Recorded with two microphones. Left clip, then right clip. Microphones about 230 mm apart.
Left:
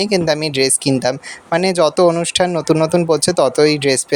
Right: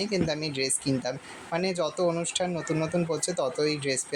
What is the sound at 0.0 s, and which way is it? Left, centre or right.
Speech, left.